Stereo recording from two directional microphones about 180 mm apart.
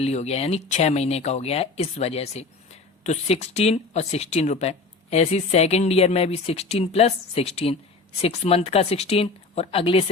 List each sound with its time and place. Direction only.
0.0 s speech: 35° left (ahead or behind)